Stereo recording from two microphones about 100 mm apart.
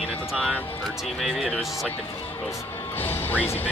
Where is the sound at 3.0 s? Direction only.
20° left (ahead or behind).